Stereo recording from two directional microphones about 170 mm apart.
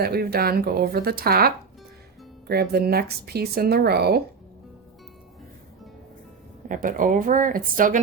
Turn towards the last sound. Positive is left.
turn(degrees=-55)  # may be behind; listen again after turning